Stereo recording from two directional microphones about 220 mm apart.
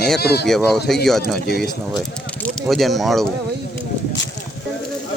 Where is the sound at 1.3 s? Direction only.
45° left (ahead or behind).